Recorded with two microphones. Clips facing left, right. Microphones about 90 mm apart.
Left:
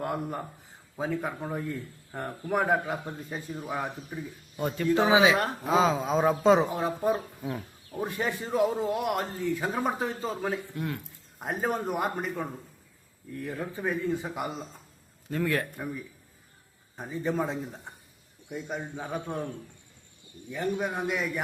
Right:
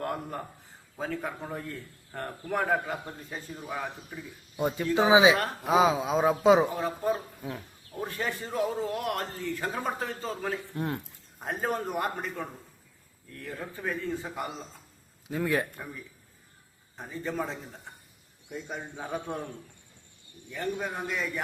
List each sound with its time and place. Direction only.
0.0 s a man's voice: 5° left (ahead or behind)
4.5 s a man's voice: 15° right (ahead or behind)
6.7 s a man's voice: 15° left (ahead or behind)
7.4 s a man's voice: 5° left (ahead or behind)
10.8 s speech: 30° right (ahead or behind)
11.3 s a man's voice: 5° left (ahead or behind)
13.5 s a man's voice: 5° left (ahead or behind)
15.3 s speech: 15° right (ahead or behind)
15.6 s a man's voice: 5° left (ahead or behind)